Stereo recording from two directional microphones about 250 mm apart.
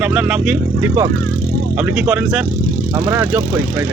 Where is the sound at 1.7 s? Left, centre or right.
Centre.